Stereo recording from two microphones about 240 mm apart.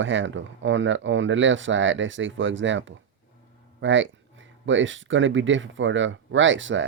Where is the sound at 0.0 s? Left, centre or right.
Right.